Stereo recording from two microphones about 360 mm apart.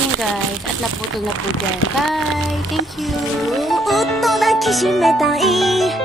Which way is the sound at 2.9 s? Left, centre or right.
Centre.